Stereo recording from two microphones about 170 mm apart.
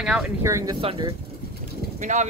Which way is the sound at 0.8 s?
35° right (ahead or behind).